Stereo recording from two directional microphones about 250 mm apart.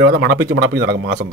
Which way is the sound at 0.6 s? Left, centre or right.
Right.